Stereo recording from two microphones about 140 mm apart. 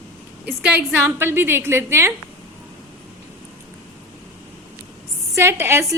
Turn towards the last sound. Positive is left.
turn(degrees=-15)  # may be behind; listen again after turning